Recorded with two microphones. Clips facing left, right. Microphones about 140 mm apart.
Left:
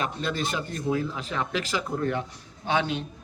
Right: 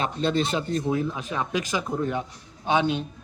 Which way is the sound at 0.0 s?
30° right (ahead or behind).